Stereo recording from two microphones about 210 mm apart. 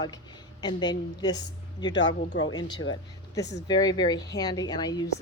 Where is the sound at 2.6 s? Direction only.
20° left (ahead or behind).